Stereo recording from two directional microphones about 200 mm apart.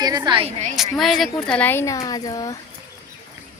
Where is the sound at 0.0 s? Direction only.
20° right (ahead or behind).